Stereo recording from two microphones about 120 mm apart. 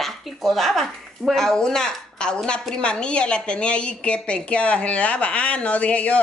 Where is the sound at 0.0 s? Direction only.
Centre (ahead or behind).